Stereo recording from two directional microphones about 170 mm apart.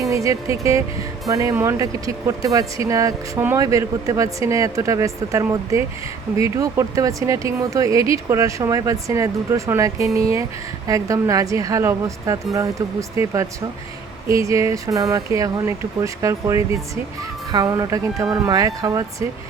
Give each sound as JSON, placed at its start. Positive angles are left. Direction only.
{"t": 0.1, "sound": "speech", "side_deg": -20}